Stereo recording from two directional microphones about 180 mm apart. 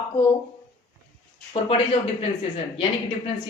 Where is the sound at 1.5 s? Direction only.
35° left (ahead or behind).